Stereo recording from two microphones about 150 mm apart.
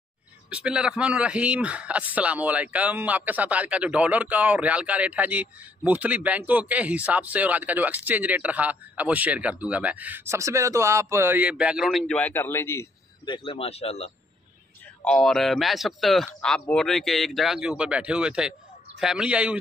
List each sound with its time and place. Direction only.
0.5 s speech: 5° right (ahead or behind)
12.2 s speech: 15° left (ahead or behind)
13.2 s speech: 35° left (ahead or behind)
15.0 s speech: 5° left (ahead or behind)